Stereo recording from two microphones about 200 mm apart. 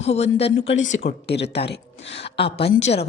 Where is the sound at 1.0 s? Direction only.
60° left (ahead or behind).